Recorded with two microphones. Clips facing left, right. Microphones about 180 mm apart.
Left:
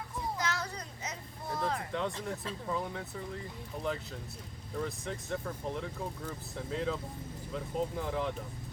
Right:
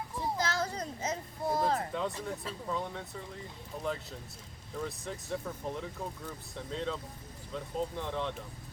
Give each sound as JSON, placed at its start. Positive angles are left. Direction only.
{"t": 0.3, "sound": "a sound", "side_deg": -30}
{"t": 1.9, "sound": "speech", "side_deg": 0}
{"t": 4.8, "sound": "speech", "side_deg": 0}